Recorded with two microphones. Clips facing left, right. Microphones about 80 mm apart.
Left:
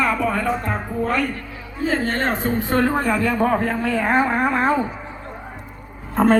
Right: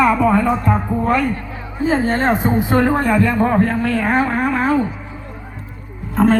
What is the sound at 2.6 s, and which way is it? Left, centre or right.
Speech, centre.